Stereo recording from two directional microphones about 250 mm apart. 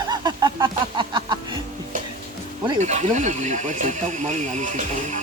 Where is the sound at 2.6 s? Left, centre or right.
Right.